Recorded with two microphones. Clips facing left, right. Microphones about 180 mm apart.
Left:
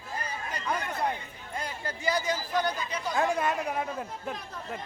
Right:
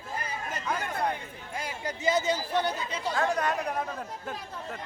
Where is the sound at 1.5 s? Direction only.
10° right (ahead or behind); by 3.1 s 25° right (ahead or behind).